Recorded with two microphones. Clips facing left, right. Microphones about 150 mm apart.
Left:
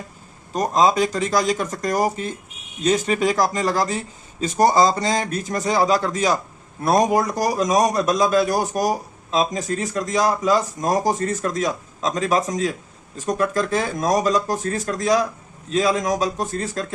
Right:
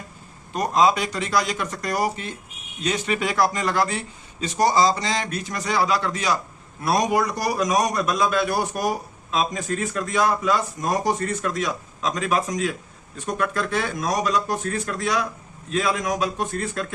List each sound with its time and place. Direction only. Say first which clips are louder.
0.5 s a man's voice: left 2 dB; 40° left (ahead or behind)